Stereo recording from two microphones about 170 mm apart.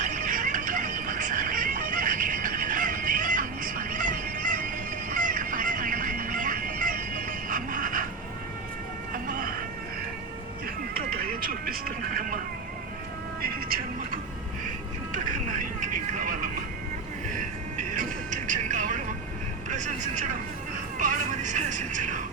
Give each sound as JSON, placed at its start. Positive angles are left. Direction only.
{"t": 0.0, "sound": "music", "side_deg": -50}
{"t": 9.2, "sound": "a sound", "side_deg": -55}
{"t": 10.9, "sound": "music", "side_deg": -60}
{"t": 13.4, "sound": "vehicle", "side_deg": -60}
{"t": 15.1, "sound": "vehicle", "side_deg": -50}
{"t": 17.7, "sound": "vehicle", "side_deg": -50}